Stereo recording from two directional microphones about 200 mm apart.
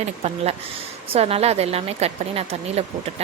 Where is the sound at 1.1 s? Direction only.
30° right (ahead or behind).